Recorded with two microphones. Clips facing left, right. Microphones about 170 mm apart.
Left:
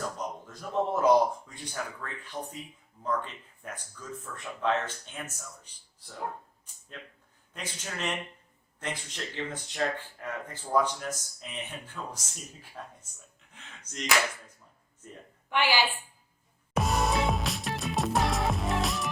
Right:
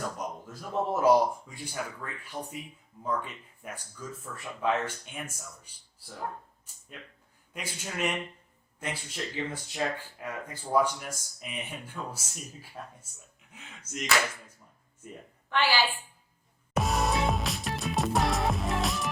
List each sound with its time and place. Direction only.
0.2 s speech: 5° right (ahead or behind)
7.5 s speech: 10° right (ahead or behind)
15.4 s a woman's voice: 15° left (ahead or behind)
16.7 s music: centre (ahead or behind)